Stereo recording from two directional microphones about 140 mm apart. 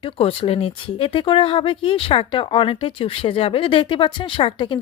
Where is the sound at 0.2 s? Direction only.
40° left (ahead or behind).